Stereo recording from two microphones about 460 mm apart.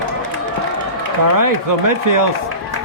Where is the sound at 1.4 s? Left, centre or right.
Right.